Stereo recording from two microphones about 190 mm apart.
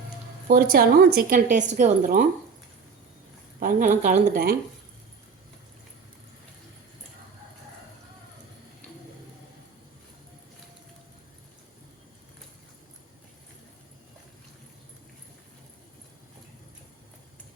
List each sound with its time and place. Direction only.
0.4 s a woman's voice: 55° right (ahead or behind)
3.6 s a woman's voice: 45° right (ahead or behind)